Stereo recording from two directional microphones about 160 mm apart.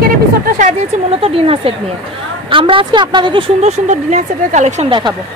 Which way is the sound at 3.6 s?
45° right (ahead or behind).